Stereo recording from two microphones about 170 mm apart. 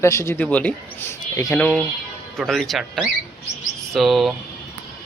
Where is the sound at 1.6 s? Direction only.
10° left (ahead or behind).